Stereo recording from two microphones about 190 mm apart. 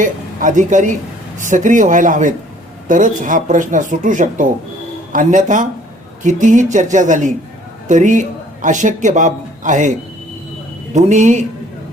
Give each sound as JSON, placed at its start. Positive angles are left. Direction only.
{"t": 0.0, "sound": "a man's voice", "side_deg": -40}
{"t": 10.9, "sound": "speech", "side_deg": -40}